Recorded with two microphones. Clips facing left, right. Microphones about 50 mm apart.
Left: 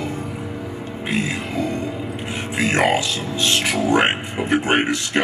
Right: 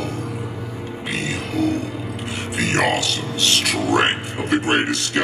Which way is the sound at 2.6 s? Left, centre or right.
Left.